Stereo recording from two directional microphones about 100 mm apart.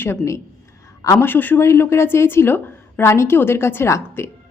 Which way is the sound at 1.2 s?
20° left (ahead or behind).